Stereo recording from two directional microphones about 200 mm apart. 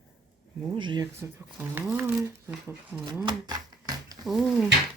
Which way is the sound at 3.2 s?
20° right (ahead or behind).